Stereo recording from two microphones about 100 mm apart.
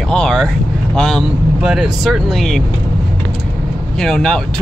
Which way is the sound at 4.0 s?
5° left (ahead or behind).